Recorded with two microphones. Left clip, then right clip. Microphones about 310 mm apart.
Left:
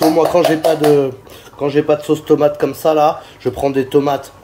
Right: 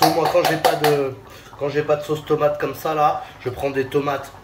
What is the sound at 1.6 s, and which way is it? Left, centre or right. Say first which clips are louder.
Speech: left 6 dB; left.